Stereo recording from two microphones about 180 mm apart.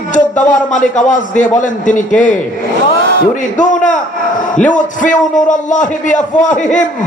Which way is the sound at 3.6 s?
45° left (ahead or behind).